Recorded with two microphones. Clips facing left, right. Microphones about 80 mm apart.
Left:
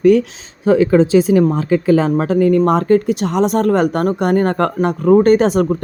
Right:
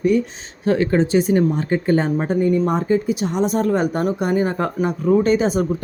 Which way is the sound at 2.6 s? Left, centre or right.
Left.